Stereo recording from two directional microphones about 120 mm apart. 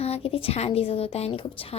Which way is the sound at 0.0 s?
55° left (ahead or behind).